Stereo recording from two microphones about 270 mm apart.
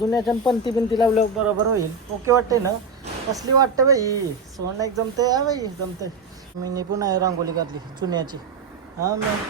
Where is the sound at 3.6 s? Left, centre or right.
Centre.